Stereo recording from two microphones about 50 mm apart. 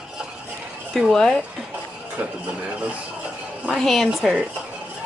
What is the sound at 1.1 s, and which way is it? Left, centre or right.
Speech, centre.